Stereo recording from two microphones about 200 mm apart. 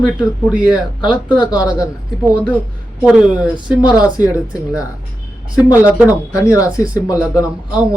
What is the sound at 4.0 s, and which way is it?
Speech, 20° left (ahead or behind).